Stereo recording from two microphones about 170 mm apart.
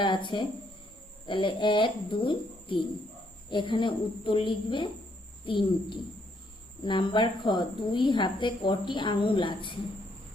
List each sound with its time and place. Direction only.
0.0 s a woman's voice: 30° left (ahead or behind)